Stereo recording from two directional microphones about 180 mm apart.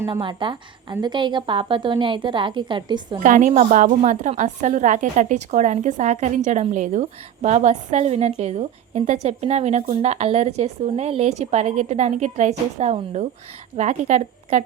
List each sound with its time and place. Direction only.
0.1 s a woman's voice: 25° right (ahead or behind)
3.2 s a woman's voice: 45° right (ahead or behind)